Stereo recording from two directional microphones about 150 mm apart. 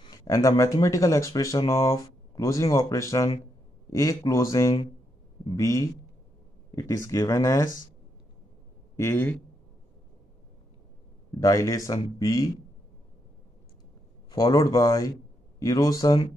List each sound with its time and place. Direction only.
0.0 s speech: 25° left (ahead or behind)
8.9 s speech: 15° left (ahead or behind)
11.3 s speech: 20° left (ahead or behind)
14.3 s speech: 25° left (ahead or behind)